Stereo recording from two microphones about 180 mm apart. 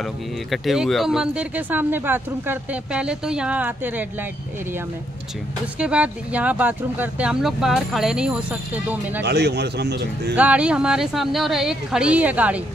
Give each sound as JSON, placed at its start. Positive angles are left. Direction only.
{"t": 0.0, "sound": "speech", "side_deg": 0}
{"t": 5.8, "sound": "speech", "side_deg": -5}
{"t": 9.2, "sound": "a man's voice", "side_deg": -70}
{"t": 10.3, "sound": "speech", "side_deg": -10}